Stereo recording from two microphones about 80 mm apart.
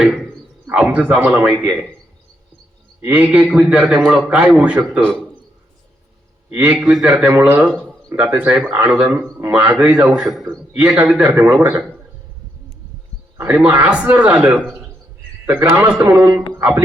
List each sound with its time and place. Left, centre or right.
0.0 s a sound: centre
0.7 s a man's voice: centre
3.1 s a man's voice: centre
6.6 s a man's voice: centre
7.3 s a man's voice: right
10.1 s a man's voice: centre
10.8 s a man's voice: centre
13.3 s a man's voice: right